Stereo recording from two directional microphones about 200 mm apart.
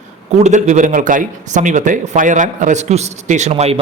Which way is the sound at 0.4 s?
35° right (ahead or behind).